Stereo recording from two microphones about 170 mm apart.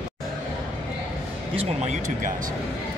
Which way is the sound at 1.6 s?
45° right (ahead or behind).